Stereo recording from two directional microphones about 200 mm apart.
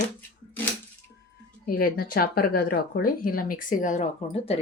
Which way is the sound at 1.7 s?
45° left (ahead or behind).